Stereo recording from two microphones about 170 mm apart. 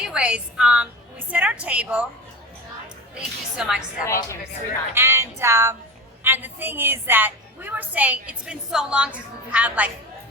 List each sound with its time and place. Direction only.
0.0 s a woman's voice: 5° right (ahead or behind)
3.2 s a woman's voice: 5° right (ahead or behind)
4.0 s a woman's voice: 15° left (ahead or behind)
4.9 s a woman's voice: 15° right (ahead or behind)